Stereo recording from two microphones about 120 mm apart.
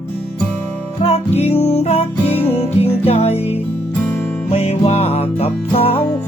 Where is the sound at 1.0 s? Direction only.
60° left (ahead or behind).